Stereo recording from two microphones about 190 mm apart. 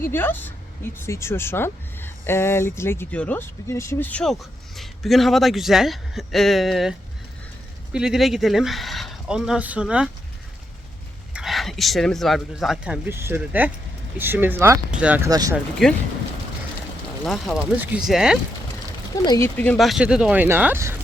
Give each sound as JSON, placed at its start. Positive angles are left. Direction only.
{"t": 0.0, "sound": "speech", "side_deg": 10}
{"t": 7.9, "sound": "speech", "side_deg": -5}
{"t": 11.3, "sound": "speech", "side_deg": 0}
{"t": 15.3, "sound": "speech", "side_deg": -20}
{"t": 15.5, "sound": "speech", "side_deg": 0}
{"t": 17.2, "sound": "speech", "side_deg": 0}
{"t": 19.1, "sound": "speech", "side_deg": 20}
{"t": 19.5, "sound": "speech", "side_deg": 5}